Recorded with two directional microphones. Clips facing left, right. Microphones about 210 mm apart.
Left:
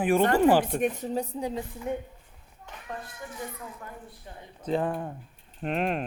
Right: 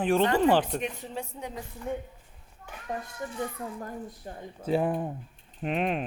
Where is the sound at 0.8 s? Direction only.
45° left (ahead or behind).